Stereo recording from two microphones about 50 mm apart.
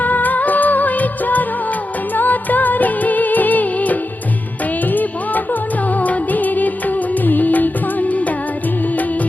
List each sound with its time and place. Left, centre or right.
0.0 s music: left
2.1 s music of bollywood: left
4.9 s music: left